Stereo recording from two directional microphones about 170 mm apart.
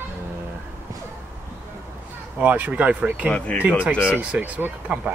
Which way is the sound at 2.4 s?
10° right (ahead or behind).